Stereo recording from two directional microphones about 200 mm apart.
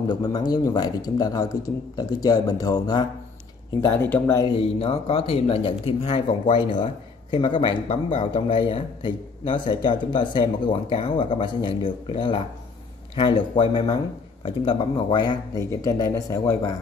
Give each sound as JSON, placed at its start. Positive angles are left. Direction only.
{"t": 0.1, "sound": "speech", "side_deg": 20}
{"t": 4.6, "sound": "speech", "side_deg": 30}